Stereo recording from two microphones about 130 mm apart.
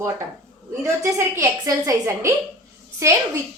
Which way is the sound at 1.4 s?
25° right (ahead or behind).